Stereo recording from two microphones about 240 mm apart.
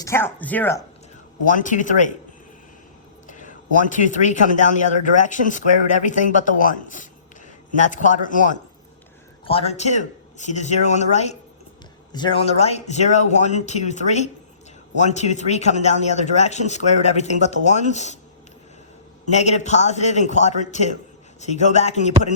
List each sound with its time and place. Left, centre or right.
0.0 s speech: centre
1.5 s a man's voice: left
3.2 s a man's voice: left
19.2 s a man's voice: left